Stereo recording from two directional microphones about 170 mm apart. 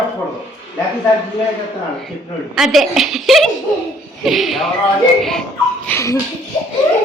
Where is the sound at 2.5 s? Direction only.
Centre (ahead or behind).